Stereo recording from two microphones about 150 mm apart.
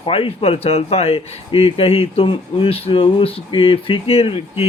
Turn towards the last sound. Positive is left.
turn(degrees=40)  # may be behind; listen again after turning